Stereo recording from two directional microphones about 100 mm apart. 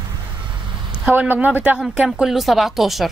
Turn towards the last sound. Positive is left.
turn(degrees=0)  # may be behind; listen again after turning